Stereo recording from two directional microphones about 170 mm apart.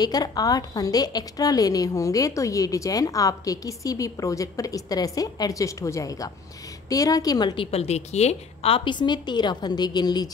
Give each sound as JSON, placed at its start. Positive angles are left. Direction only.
{"t": 0.0, "sound": "a woman's voice", "side_deg": 25}